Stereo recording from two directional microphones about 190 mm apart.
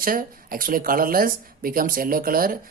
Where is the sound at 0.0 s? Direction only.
50° right (ahead or behind).